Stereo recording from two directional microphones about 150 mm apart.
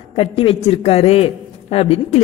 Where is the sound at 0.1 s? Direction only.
40° left (ahead or behind).